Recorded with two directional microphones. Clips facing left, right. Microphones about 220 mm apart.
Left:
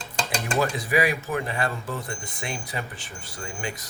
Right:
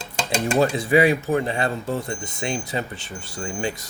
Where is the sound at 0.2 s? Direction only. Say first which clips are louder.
Right 5 dB; 25° right (ahead or behind).